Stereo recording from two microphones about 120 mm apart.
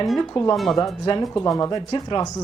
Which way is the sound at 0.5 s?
Centre (ahead or behind).